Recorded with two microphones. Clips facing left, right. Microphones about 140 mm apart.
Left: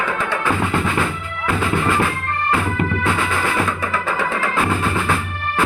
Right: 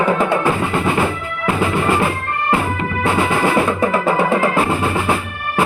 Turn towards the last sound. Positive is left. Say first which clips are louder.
# right 7 dB
turn(degrees=-30)  # may be behind; listen again after turning